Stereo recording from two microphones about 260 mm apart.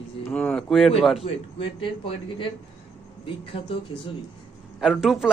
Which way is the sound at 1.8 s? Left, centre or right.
Centre.